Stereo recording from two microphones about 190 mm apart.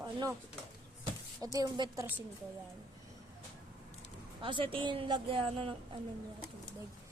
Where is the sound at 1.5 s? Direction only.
20° right (ahead or behind).